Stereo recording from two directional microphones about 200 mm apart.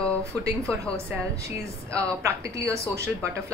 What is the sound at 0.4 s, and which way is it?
A woman's voice, 15° right (ahead or behind).